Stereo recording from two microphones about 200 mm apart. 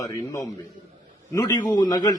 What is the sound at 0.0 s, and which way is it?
A man's voice, 15° left (ahead or behind).